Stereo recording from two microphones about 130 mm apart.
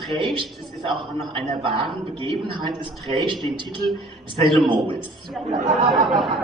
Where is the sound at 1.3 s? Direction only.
45° right (ahead or behind).